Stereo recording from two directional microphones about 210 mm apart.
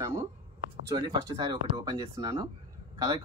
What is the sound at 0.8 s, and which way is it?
Speech, 20° right (ahead or behind).